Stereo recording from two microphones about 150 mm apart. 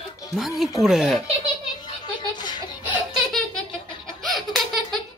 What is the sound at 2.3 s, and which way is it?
Laughter, 30° left (ahead or behind).